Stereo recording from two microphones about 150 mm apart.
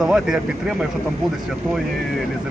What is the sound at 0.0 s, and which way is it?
Speech, 5° right (ahead or behind).